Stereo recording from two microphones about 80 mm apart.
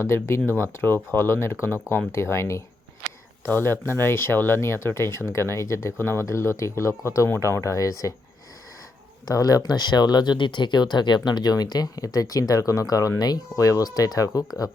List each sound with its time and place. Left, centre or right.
0.0 s speech: left
9.2 s speech: left